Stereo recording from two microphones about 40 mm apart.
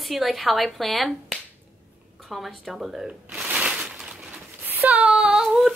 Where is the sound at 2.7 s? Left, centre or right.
Centre.